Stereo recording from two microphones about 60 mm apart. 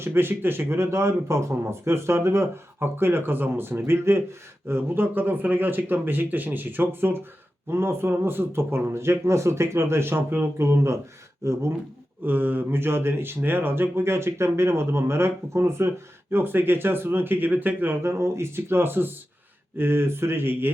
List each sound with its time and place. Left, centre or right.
0.0 s speech: right
12.2 s speech: right
18.0 s speech: right